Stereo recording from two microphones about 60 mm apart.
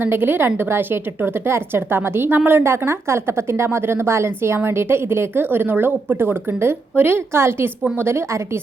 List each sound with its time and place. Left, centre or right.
0.0 s a woman's voice: right